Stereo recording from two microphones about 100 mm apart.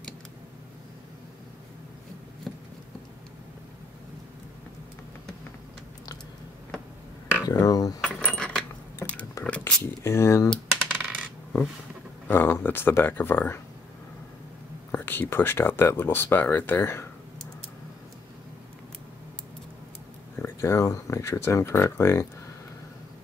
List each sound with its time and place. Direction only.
2.5 s a sound: centre (ahead or behind)
7.4 s a sound: 35° left (ahead or behind)
8.0 s cutlery: 5° left (ahead or behind)
9.4 s a sound: 15° left (ahead or behind)
10.0 s speech: 25° left (ahead or behind)
10.9 s coin: 10° right (ahead or behind)
12.3 s speech: 20° left (ahead or behind)
14.9 s speech: 20° left (ahead or behind)
20.3 s speech: 25° left (ahead or behind)